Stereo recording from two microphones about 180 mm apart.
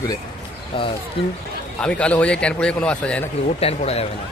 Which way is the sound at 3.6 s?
35° left (ahead or behind).